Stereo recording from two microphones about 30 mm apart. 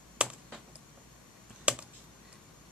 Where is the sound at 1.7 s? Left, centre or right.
Right.